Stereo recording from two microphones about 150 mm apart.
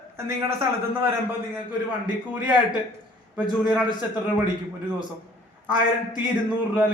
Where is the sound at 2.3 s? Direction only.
10° right (ahead or behind).